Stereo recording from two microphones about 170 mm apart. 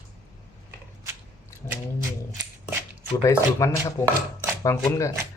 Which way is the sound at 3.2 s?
20° left (ahead or behind).